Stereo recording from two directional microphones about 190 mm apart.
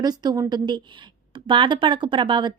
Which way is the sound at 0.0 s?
20° right (ahead or behind).